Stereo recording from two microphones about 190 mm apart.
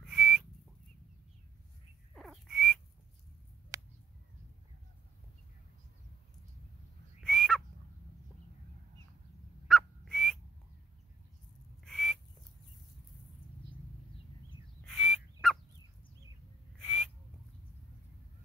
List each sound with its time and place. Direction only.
0.0 s whistle: centre (ahead or behind)
2.1 s frog: centre (ahead or behind)
3.7 s a sound: 15° right (ahead or behind)
7.2 s a sound: 5° left (ahead or behind)
9.7 s whistle: centre (ahead or behind)
11.8 s whistle: 5° left (ahead or behind)
14.9 s bird: centre (ahead or behind)
16.8 s owl: 5° left (ahead or behind)